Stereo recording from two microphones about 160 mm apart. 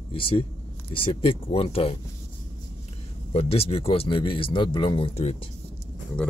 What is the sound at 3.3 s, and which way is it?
A man's voice, 40° left (ahead or behind).